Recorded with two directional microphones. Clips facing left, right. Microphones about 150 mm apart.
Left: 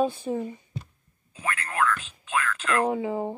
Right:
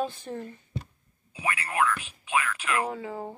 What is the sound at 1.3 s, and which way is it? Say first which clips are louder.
Speech: right 1 dB; 10° right (ahead or behind).